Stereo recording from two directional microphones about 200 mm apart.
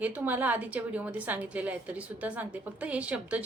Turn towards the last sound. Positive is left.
turn(degrees=-5)  # may be behind; listen again after turning